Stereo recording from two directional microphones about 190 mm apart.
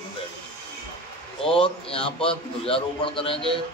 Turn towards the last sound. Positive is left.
turn(degrees=25)  # may be behind; listen again after turning